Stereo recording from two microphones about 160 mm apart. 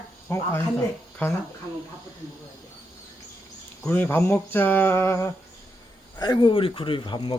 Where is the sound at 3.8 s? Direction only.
10° left (ahead or behind).